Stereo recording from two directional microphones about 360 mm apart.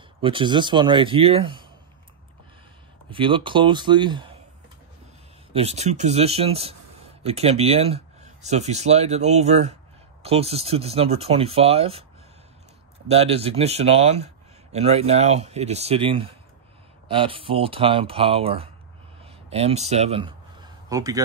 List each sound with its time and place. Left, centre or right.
0.2 s a man's voice: centre
3.1 s a man's voice: centre
5.5 s a man's voice: centre
13.1 s a man's voice: centre